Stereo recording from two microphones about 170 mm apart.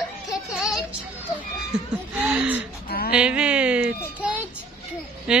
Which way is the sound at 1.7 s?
5° right (ahead or behind).